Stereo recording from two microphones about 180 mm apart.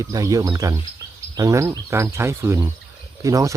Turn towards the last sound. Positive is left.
turn(degrees=-20)  # may be behind; listen again after turning